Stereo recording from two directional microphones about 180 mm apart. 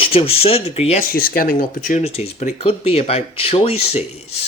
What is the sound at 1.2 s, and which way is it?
Speech, 55° left (ahead or behind).